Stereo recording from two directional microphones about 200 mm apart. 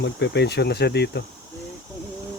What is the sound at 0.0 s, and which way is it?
Speech, 60° left (ahead or behind).